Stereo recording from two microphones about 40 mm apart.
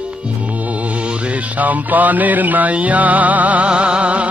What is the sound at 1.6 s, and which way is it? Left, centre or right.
Music, right.